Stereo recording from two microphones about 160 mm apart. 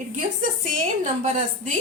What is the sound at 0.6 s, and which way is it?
Speech, 55° right (ahead or behind).